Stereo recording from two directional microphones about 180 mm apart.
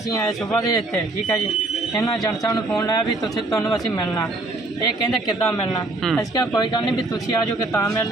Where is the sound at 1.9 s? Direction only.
20° left (ahead or behind).